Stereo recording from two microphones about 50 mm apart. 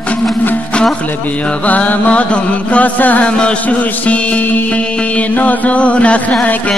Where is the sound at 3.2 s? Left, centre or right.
Left.